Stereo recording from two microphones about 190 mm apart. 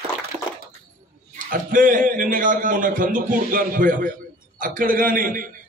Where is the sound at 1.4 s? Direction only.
45° right (ahead or behind).